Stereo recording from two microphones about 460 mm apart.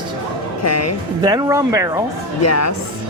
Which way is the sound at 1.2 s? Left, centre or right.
Centre.